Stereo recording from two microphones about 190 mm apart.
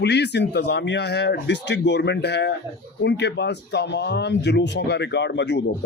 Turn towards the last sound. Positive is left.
turn(degrees=65)  # may be behind; listen again after turning